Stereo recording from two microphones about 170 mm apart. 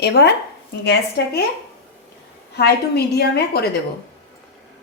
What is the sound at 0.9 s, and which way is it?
Speech, 70° left (ahead or behind).